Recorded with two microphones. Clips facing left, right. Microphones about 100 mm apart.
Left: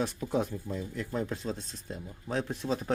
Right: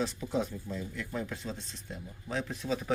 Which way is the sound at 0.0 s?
55° left (ahead or behind).